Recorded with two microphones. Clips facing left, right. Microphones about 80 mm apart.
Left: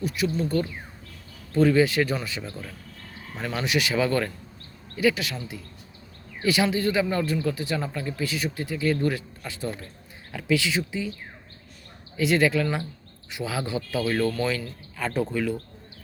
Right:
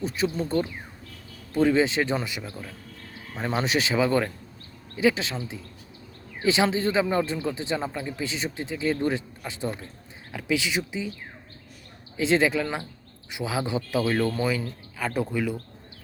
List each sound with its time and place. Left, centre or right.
0.0 s speech: right
3.9 s speech: centre
6.4 s speech: right
12.1 s speech: right